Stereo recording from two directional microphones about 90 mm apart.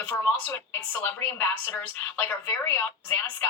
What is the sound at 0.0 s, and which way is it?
Speech, 20° left (ahead or behind).